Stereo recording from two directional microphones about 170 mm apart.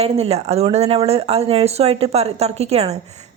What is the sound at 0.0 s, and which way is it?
A woman's voice, 35° right (ahead or behind).